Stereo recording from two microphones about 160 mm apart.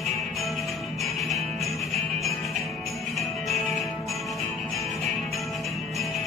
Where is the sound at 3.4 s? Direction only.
Centre (ahead or behind).